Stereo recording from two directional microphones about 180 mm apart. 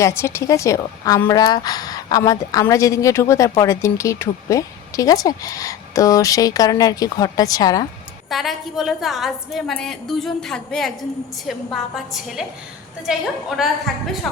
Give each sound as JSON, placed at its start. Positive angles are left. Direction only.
{"t": 0.0, "sound": "a woman's voice", "side_deg": 15}
{"t": 8.3, "sound": "a woman's voice", "side_deg": 0}
{"t": 13.6, "sound": "a woman's voice", "side_deg": 0}